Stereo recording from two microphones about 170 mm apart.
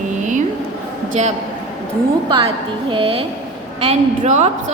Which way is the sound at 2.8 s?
30° right (ahead or behind).